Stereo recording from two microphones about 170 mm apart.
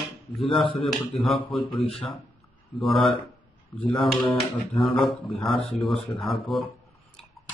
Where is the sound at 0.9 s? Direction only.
Centre (ahead or behind).